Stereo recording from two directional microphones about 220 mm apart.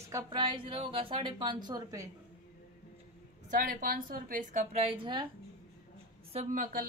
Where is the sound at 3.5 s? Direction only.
40° right (ahead or behind); by 5.2 s 25° right (ahead or behind).